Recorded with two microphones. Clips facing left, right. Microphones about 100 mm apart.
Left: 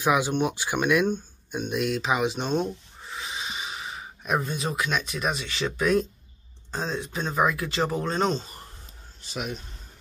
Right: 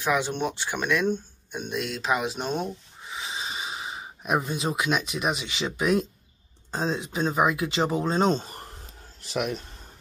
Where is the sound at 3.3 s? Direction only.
25° right (ahead or behind).